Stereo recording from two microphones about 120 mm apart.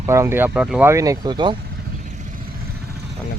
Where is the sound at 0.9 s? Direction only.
25° right (ahead or behind).